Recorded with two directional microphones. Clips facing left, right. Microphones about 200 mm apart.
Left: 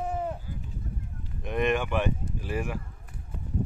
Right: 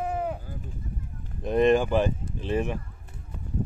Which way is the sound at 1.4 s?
35° right (ahead or behind).